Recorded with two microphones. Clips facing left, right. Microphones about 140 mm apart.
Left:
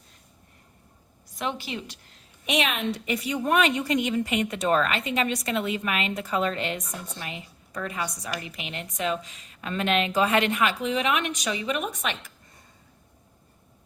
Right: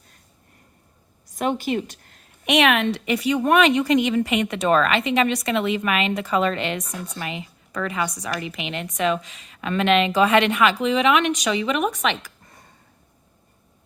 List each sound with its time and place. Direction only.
1.4 s a woman's voice: 50° right (ahead or behind); by 12.6 s 85° right